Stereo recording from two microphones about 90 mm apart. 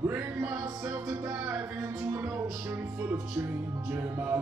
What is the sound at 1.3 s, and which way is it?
Music, 20° right (ahead or behind).